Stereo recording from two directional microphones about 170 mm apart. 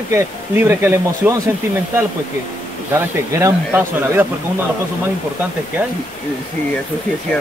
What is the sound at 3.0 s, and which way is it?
Speech, 15° right (ahead or behind).